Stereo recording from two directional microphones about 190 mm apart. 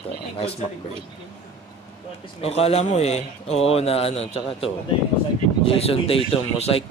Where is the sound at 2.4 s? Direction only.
30° left (ahead or behind).